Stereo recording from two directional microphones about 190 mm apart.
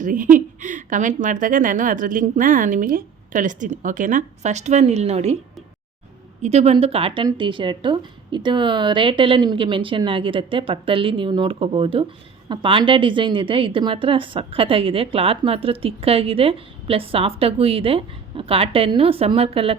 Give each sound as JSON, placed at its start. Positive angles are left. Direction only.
{"t": 0.0, "sound": "a woman's voice", "side_deg": -45}
{"t": 6.4, "sound": "a woman's voice", "side_deg": -35}